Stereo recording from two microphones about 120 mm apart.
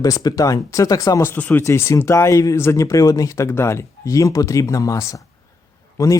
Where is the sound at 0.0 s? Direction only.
30° left (ahead or behind).